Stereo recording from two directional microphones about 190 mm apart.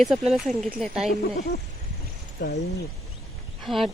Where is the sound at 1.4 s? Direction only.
60° left (ahead or behind).